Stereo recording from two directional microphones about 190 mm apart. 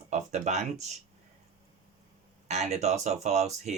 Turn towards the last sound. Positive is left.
turn(degrees=-35)  # may be behind; listen again after turning